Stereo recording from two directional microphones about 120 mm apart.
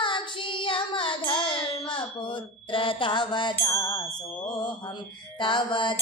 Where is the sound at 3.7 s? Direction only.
25° left (ahead or behind).